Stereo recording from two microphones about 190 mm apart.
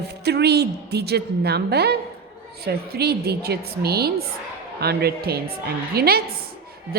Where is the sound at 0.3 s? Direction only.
60° right (ahead or behind).